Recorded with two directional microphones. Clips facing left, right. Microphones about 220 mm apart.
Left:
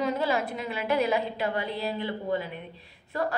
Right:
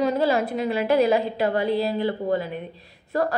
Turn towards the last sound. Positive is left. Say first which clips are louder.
# right 6 dB
turn(degrees=-40)  # may be behind; listen again after turning